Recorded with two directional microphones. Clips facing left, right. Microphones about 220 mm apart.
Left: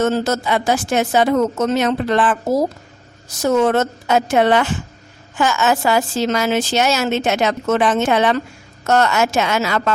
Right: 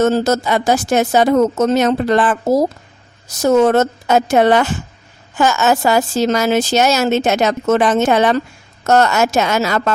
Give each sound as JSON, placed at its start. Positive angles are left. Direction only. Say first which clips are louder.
{"t": 0.0, "sound": "speech", "louder": "right 4 dB", "side_deg": -40}